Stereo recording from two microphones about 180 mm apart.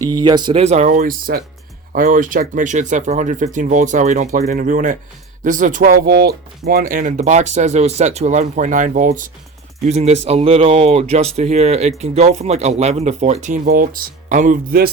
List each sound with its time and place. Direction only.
0.1 s speech: 25° right (ahead or behind); by 14.8 s 50° right (ahead or behind)